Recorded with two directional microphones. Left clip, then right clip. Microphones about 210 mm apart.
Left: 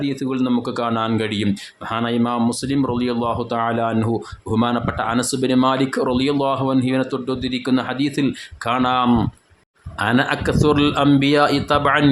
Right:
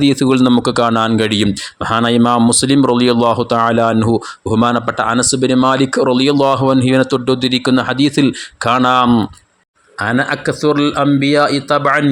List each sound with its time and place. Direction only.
0.0 s a man's voice: 40° right (ahead or behind); by 12.0 s 15° right (ahead or behind)